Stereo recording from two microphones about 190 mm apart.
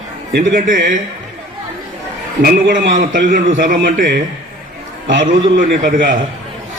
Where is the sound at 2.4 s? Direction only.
50° right (ahead or behind).